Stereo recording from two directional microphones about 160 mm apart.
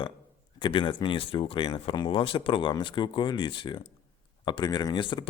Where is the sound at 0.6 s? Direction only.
30° left (ahead or behind).